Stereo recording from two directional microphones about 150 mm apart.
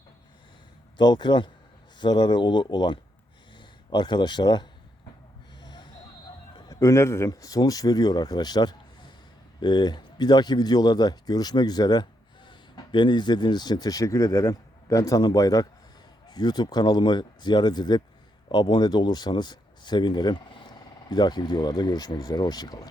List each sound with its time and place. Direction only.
0.9 s a man's voice: 30° left (ahead or behind)
5.5 s gasp: 30° left (ahead or behind)
6.6 s a man's voice: 25° left (ahead or behind)